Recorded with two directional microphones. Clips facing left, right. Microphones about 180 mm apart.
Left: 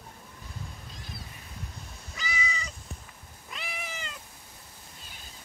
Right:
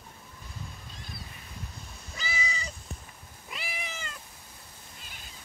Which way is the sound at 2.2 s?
30° right (ahead or behind).